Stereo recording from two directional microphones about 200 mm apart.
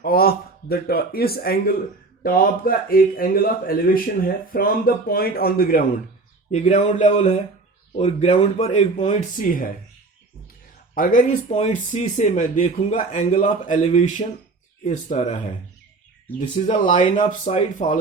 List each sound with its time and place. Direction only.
0.0 s speech: 50° left (ahead or behind)
6.5 s speech: 35° left (ahead or behind)
10.9 s speech: 40° left (ahead or behind)
16.6 s speech: 35° left (ahead or behind)